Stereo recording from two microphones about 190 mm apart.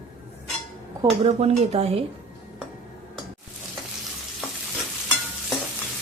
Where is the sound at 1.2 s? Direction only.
35° right (ahead or behind).